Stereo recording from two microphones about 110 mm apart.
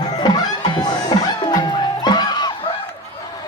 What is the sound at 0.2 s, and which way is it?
Music, 40° left (ahead or behind).